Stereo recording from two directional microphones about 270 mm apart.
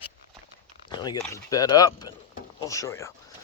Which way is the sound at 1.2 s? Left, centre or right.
Centre.